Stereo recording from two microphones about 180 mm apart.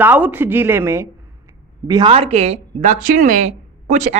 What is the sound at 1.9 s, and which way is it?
A man's voice, 25° right (ahead or behind).